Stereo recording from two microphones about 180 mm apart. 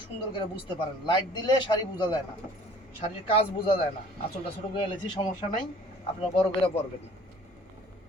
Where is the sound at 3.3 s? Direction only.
30° left (ahead or behind).